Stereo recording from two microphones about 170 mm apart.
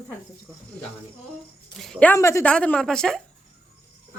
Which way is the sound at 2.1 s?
15° left (ahead or behind).